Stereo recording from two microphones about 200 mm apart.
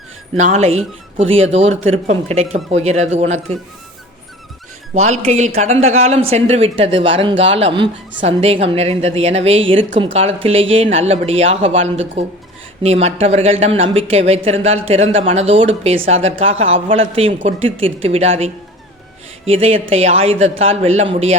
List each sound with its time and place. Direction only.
0.3 s speech: 35° right (ahead or behind)
4.9 s speech: 35° right (ahead or behind)